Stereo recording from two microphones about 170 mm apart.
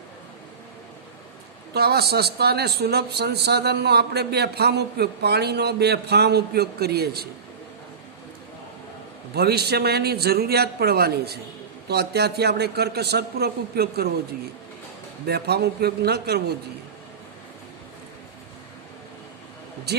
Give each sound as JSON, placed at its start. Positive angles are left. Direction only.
{"t": 1.7, "sound": "speech", "side_deg": -70}
{"t": 9.3, "sound": "speech", "side_deg": -70}
{"t": 15.3, "sound": "speech", "side_deg": -70}